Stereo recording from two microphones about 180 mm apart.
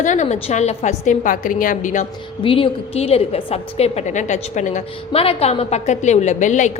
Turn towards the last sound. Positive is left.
turn(degrees=45)  # may be behind; listen again after turning